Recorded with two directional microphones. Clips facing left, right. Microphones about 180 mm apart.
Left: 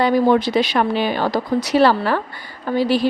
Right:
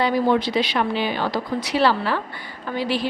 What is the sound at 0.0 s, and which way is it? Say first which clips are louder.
A woman's voice: left 4 dB; 45° left (ahead or behind).